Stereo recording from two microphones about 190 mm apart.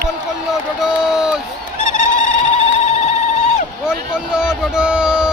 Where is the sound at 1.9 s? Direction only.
40° left (ahead or behind).